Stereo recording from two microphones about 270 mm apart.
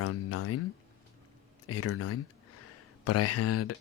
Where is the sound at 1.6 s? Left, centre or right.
Left.